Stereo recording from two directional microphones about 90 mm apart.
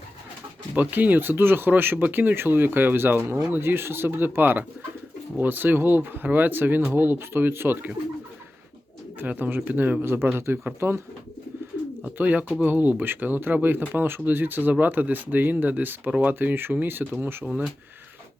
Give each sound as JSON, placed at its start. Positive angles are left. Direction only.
{"t": 0.8, "sound": "speech", "side_deg": -20}
{"t": 9.1, "sound": "speech", "side_deg": -20}
{"t": 12.0, "sound": "speech", "side_deg": -15}